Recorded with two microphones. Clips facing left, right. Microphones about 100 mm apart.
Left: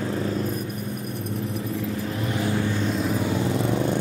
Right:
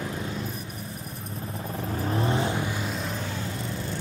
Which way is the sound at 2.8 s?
Centre (ahead or behind).